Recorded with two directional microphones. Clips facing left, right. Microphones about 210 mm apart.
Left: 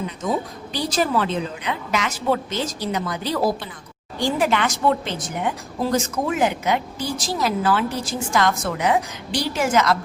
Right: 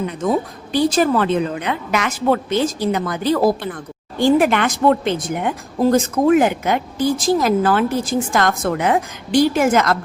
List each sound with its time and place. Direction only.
0.7 s a woman's voice: 55° right (ahead or behind)